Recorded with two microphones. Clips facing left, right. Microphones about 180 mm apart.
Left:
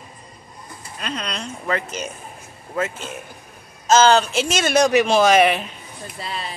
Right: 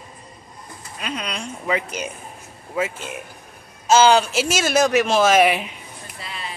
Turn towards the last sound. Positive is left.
turn(degrees=35)  # may be behind; listen again after turning